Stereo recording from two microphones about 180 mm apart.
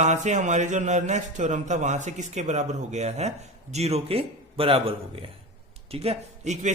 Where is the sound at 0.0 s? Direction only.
40° right (ahead or behind).